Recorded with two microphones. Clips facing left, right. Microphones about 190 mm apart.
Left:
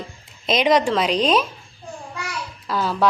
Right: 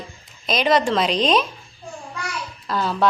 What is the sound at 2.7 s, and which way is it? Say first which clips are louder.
Speech: even; 10° left (ahead or behind).